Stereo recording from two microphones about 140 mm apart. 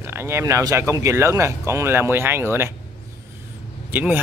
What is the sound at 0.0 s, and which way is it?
Speech, 15° right (ahead or behind).